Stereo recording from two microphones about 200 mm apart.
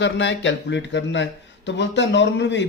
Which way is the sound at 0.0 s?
65° left (ahead or behind).